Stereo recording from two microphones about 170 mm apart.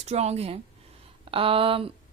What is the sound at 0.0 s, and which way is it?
Speech, 40° right (ahead or behind).